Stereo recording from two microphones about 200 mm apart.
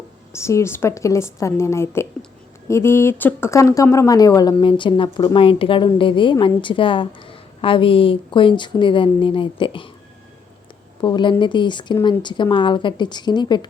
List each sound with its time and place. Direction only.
0.3 s a woman's voice: 15° left (ahead or behind)
11.0 s a woman's voice: 25° left (ahead or behind)